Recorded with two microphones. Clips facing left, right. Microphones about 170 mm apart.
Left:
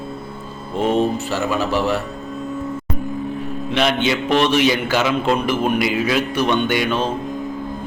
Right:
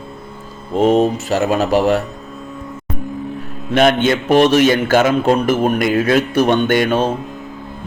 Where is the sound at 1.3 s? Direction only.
50° right (ahead or behind).